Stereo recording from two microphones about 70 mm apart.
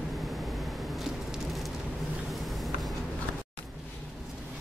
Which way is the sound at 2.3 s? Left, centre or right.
Centre.